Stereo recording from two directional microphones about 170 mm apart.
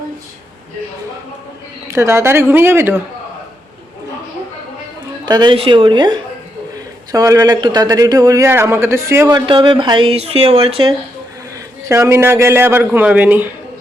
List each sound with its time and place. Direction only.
1.9 s a man's voice: 15° right (ahead or behind)
5.2 s speech: 25° right (ahead or behind)
9.3 s speech: 30° right (ahead or behind)
11.9 s a man's voice: 15° right (ahead or behind)